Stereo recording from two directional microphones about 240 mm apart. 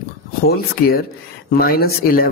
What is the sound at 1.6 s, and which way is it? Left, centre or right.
Speech, left.